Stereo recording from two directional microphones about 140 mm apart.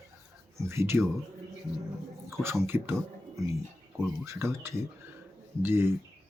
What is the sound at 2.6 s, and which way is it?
Speech, 15° right (ahead or behind).